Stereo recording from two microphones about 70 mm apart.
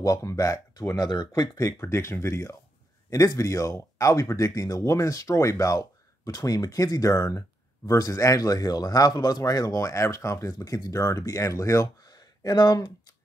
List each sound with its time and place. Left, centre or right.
0.0 s speech: left
1.6 s speech: left
3.1 s speech: left